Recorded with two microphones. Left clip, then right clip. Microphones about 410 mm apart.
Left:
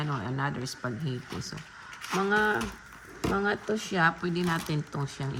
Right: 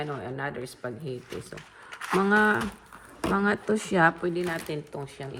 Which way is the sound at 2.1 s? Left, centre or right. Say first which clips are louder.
Right 3 dB; right.